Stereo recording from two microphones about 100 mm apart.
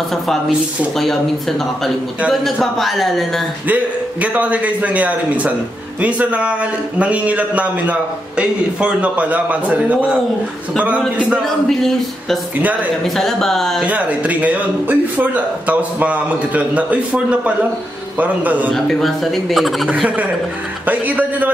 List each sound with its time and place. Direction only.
0.9 s speech: 5° left (ahead or behind)
2.2 s speech: centre (ahead or behind)
3.6 s a man's voice: 15° right (ahead or behind)
13.0 s speech: 5° left (ahead or behind)
13.8 s a man's voice: 15° right (ahead or behind)
18.7 s speech: 5° left (ahead or behind)
20.8 s a man's voice: 15° right (ahead or behind)